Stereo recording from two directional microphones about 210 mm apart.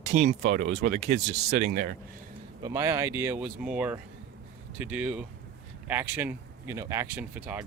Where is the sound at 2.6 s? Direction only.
15° right (ahead or behind).